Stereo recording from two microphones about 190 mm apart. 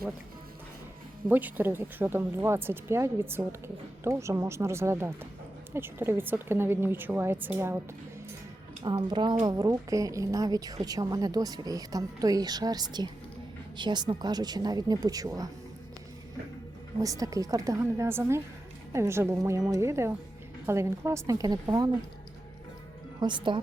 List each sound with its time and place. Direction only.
1.3 s speech: 10° right (ahead or behind)
8.8 s a woman's voice: 20° right (ahead or behind)
17.0 s speech: 20° right (ahead or behind)
23.2 s a woman's voice: 25° right (ahead or behind)